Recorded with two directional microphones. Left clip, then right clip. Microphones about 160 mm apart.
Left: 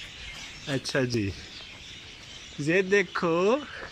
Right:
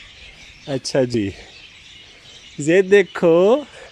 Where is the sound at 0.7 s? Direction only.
35° right (ahead or behind).